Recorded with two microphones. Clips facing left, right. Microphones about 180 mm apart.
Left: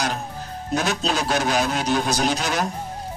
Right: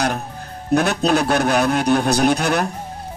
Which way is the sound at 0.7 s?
65° right (ahead or behind).